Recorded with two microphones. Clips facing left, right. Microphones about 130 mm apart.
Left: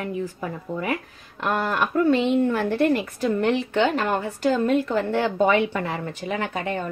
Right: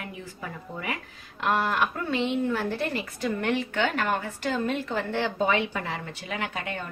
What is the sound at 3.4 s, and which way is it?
A woman's voice, 30° left (ahead or behind).